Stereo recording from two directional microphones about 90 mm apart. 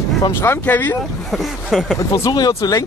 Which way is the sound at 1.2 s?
Centre (ahead or behind).